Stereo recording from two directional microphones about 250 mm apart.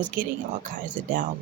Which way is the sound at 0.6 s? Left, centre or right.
Right.